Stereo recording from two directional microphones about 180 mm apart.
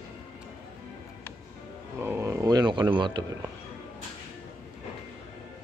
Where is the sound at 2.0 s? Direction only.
15° right (ahead or behind).